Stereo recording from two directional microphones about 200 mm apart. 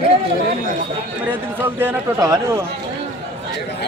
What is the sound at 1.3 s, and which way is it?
Speech, 10° right (ahead or behind).